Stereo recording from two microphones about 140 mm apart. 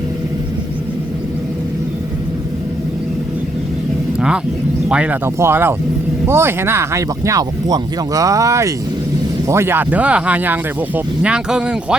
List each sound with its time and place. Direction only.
4.9 s speech: 10° right (ahead or behind)